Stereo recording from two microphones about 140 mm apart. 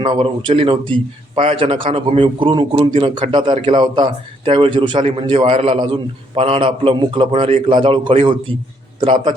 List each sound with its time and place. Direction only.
0.0 s a man's voice: 40° right (ahead or behind)